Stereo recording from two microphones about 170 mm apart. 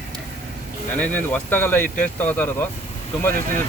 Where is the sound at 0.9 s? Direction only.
10° left (ahead or behind).